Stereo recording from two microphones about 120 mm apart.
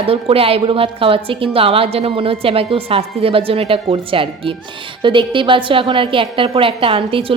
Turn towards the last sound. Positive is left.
turn(degrees=-50)  # may be behind; listen again after turning